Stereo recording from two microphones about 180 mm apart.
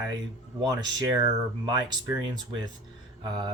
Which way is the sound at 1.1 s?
25° right (ahead or behind).